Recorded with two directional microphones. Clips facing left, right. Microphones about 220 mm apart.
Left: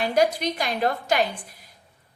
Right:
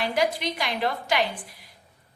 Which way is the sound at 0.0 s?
45° left (ahead or behind).